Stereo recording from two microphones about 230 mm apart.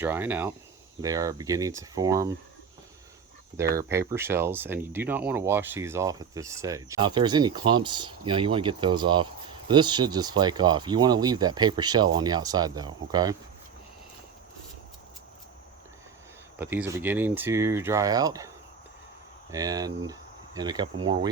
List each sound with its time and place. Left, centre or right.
0.0 s speech: centre
3.8 s speech: centre
16.6 s speech: centre